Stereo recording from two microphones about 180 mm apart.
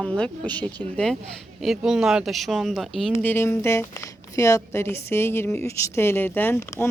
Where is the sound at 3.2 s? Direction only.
15° left (ahead or behind).